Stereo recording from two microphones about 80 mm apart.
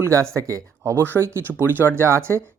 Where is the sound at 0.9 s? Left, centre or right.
Right.